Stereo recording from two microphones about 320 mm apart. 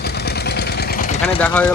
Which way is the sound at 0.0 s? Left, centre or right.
Left.